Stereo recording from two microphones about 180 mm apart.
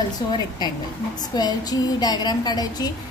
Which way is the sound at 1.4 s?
20° left (ahead or behind).